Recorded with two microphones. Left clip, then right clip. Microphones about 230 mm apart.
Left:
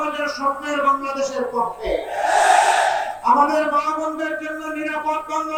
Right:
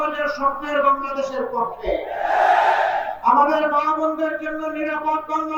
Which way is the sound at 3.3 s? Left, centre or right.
Right.